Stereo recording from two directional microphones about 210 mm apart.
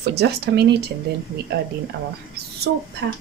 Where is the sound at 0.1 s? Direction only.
50° right (ahead or behind).